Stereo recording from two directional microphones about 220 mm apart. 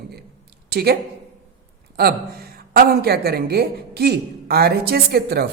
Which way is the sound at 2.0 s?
45° right (ahead or behind).